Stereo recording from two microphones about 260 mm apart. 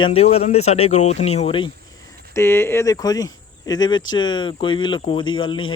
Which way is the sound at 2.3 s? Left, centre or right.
Centre.